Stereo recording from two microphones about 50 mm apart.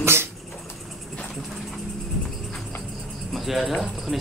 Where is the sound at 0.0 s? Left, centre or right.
Right.